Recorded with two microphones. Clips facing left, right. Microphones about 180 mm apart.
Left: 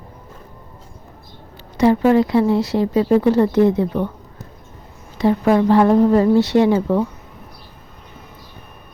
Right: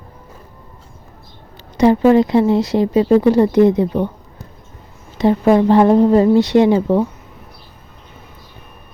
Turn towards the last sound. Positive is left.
turn(degrees=-20)  # may be behind; listen again after turning